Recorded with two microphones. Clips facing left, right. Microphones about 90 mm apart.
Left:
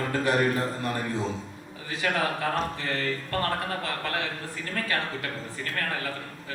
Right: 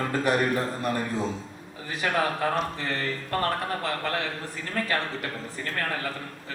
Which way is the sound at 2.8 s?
20° right (ahead or behind).